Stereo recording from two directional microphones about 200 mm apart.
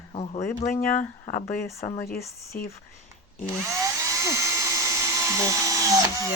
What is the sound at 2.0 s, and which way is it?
Speech, 50° left (ahead or behind).